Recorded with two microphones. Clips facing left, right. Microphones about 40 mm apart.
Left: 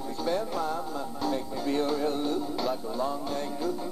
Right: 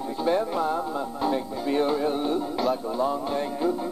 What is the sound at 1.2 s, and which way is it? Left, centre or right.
Music, right.